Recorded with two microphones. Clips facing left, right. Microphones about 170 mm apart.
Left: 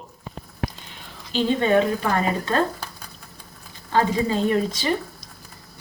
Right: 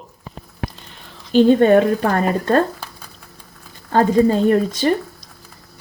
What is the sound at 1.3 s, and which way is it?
A woman's voice, 50° right (ahead or behind).